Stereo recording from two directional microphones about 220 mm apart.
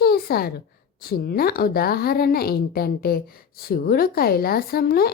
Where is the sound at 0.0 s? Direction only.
45° left (ahead or behind).